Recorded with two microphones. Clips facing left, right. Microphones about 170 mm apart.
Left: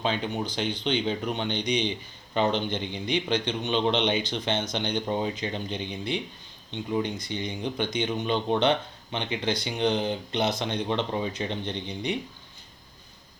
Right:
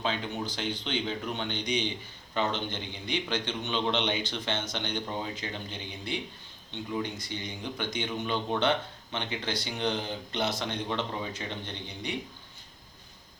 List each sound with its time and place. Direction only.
0.0 s speech: 20° left (ahead or behind)